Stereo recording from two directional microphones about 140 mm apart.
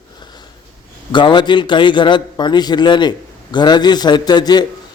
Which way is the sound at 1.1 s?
35° left (ahead or behind).